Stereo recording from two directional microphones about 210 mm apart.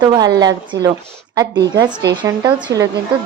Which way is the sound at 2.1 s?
20° right (ahead or behind).